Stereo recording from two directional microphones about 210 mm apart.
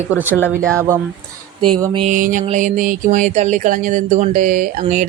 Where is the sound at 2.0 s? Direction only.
35° right (ahead or behind).